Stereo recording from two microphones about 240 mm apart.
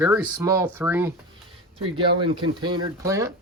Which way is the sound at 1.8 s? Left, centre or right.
Right.